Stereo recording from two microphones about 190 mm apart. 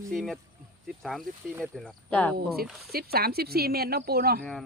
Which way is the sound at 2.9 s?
55° right (ahead or behind).